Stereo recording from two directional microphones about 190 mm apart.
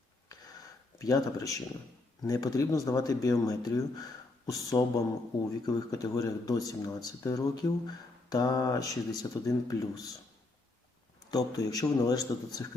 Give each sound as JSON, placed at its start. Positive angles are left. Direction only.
{"t": 0.9, "sound": "speech", "side_deg": 20}
{"t": 11.3, "sound": "speech", "side_deg": 20}